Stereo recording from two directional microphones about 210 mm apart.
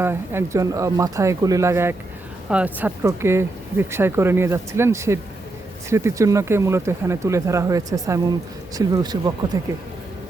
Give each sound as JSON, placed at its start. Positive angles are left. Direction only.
{"t": 0.0, "sound": "speech", "side_deg": -10}